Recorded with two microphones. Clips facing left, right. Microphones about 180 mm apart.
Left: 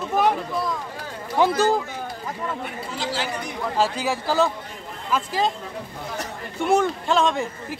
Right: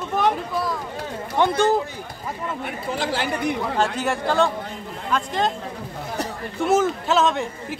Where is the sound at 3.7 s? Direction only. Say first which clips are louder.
Even; centre (ahead or behind).